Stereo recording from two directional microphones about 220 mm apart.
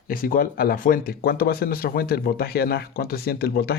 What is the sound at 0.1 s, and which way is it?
Speech, 40° left (ahead or behind).